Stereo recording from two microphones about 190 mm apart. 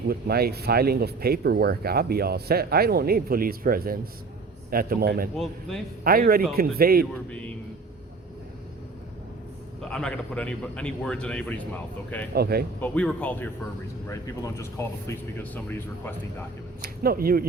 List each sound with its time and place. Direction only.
0.1 s a man's voice: 55° right (ahead or behind)
5.4 s a man's voice: centre (ahead or behind)
6.1 s a man's voice: 50° right (ahead or behind)
7.3 s speech: 5° left (ahead or behind)
9.9 s a man's voice: 5° left (ahead or behind)
12.3 s speech: 55° right (ahead or behind)
12.8 s speech: 5° left (ahead or behind)
16.8 s a man's voice: 50° right (ahead or behind)